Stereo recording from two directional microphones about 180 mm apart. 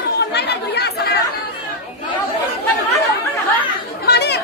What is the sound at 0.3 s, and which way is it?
Chatter, 65° left (ahead or behind).